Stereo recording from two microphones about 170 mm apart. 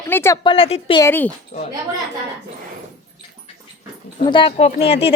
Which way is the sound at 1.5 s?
40° left (ahead or behind).